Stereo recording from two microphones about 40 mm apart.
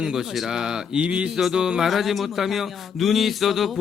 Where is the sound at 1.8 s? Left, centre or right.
Centre.